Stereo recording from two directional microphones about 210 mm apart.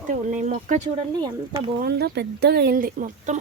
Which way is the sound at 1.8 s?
50° right (ahead or behind).